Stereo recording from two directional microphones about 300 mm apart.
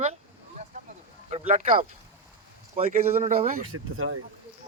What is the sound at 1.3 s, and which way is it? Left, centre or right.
Speech, right.